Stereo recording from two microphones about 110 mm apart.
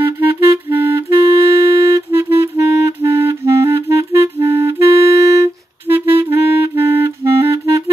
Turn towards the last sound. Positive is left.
turn(degrees=-30)  # may be behind; listen again after turning